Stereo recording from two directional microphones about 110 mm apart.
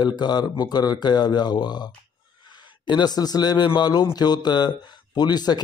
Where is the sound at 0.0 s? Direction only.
40° left (ahead or behind).